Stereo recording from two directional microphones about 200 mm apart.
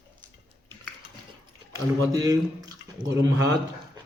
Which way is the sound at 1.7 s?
15° right (ahead or behind).